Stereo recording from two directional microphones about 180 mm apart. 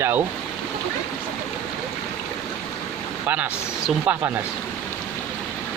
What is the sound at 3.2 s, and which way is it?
Speech, 10° right (ahead or behind).